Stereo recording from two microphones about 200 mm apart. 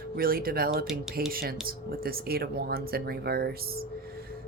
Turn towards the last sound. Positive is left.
turn(degrees=-50)  # may be behind; listen again after turning